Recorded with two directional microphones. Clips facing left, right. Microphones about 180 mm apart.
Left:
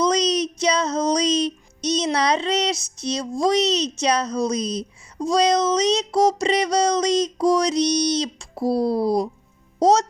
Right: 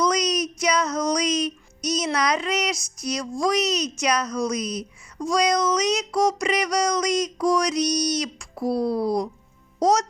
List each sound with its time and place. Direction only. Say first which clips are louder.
0.0 s music: left 3 dB; 30° left (ahead or behind)